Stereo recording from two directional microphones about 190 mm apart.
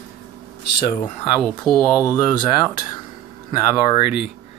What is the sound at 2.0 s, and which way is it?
Speech, 15° left (ahead or behind).